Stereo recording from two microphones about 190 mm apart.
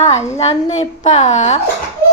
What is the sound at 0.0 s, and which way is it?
Speech, 35° left (ahead or behind).